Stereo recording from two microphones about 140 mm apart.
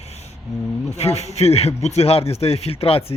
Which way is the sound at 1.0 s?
50° left (ahead or behind).